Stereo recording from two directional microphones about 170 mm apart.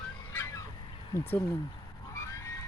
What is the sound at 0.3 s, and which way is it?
Fowl, 15° left (ahead or behind).